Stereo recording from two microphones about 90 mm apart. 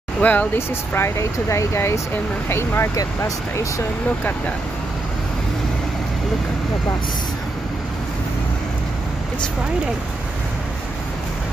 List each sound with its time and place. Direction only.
0.2 s speech: 15° left (ahead or behind); by 3.8 s 35° left (ahead or behind)